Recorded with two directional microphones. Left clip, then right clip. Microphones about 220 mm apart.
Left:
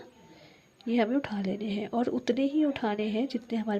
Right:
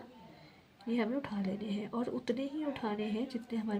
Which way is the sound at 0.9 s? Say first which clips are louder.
Left 7 dB; 50° left (ahead or behind).